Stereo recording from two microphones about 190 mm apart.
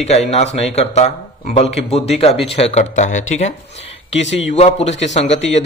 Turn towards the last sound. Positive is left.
turn(degrees=35)  # may be behind; listen again after turning